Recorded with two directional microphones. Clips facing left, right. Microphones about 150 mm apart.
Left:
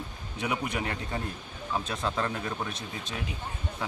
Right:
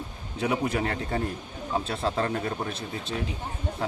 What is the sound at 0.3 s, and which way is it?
Speech, 30° right (ahead or behind).